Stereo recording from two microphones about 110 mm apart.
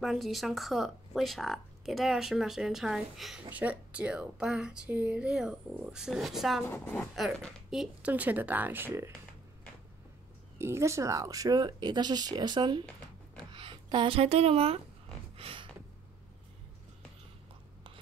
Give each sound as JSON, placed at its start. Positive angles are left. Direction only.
{"t": 0.0, "sound": "speech", "side_deg": 0}
{"t": 3.4, "sound": "a woman's voice", "side_deg": -15}
{"t": 6.6, "sound": "a woman's voice", "side_deg": 15}
{"t": 7.7, "sound": "speech", "side_deg": -5}
{"t": 8.1, "sound": "a woman's voice", "side_deg": -15}
{"t": 10.6, "sound": "speech", "side_deg": -25}
{"t": 15.3, "sound": "gasp", "side_deg": -60}